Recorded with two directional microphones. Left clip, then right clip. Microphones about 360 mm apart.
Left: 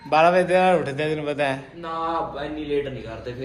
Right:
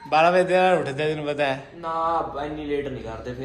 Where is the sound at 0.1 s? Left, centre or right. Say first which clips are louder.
Left 1 dB; centre.